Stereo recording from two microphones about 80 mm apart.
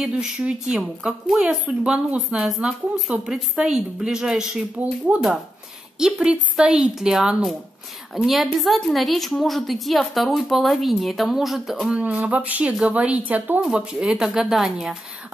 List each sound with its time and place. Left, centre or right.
0.0 s speech: centre
5.1 s a woman's voice: centre
11.9 s speech: centre